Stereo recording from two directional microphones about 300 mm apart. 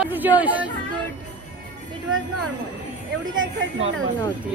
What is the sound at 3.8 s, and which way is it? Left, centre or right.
Speech, right.